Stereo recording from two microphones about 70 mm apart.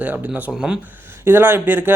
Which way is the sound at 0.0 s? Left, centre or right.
Right.